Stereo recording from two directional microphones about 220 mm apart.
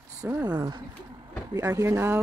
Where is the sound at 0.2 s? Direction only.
10° right (ahead or behind).